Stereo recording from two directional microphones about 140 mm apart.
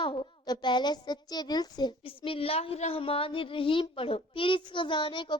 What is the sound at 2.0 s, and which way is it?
Speech, 40° left (ahead or behind).